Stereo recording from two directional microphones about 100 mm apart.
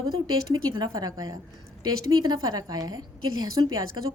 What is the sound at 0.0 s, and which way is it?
A woman's voice, 40° right (ahead or behind).